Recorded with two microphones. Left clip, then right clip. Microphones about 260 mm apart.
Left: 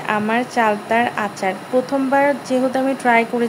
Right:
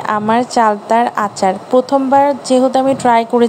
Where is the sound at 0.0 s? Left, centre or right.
Right.